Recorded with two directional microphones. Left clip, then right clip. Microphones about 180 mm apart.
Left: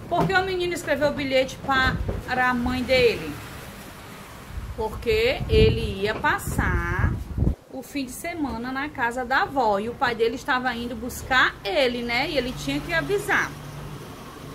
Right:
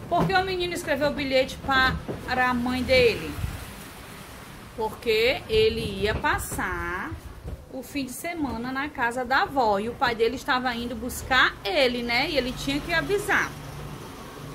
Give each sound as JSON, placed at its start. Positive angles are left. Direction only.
{"t": 0.1, "sound": "a woman's voice", "side_deg": 0}
{"t": 4.7, "sound": "a woman's voice", "side_deg": -5}